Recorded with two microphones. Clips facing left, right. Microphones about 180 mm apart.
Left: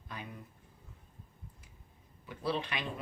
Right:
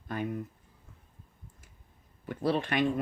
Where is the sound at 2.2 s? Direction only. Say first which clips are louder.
Right 6 dB; 50° right (ahead or behind).